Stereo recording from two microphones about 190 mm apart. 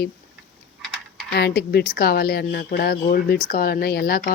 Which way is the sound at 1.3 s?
60° left (ahead or behind).